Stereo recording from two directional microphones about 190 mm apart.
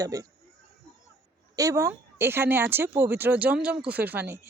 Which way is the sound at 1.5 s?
15° right (ahead or behind).